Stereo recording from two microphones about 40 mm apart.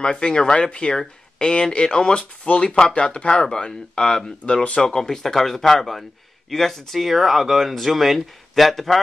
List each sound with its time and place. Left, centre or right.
0.0 s speech: left; by 9.0 s centre